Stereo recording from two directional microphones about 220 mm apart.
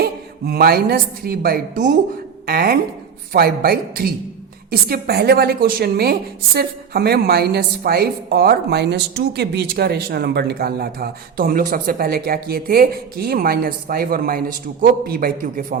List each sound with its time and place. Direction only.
0.0 s a woman's voice: 45° right (ahead or behind)